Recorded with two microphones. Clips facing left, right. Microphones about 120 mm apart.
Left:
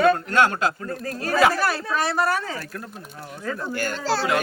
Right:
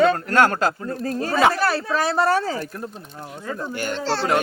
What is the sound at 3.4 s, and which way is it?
Speech, 20° right (ahead or behind).